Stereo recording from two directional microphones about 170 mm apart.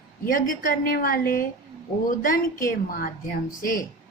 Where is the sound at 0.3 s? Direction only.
55° left (ahead or behind).